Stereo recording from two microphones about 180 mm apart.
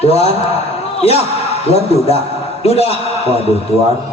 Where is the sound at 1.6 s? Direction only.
35° left (ahead or behind).